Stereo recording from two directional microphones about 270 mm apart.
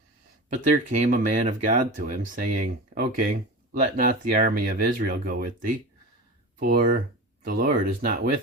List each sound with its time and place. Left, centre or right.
0.5 s speech: right